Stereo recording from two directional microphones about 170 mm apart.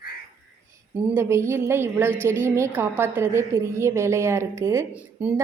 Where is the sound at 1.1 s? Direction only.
15° right (ahead or behind).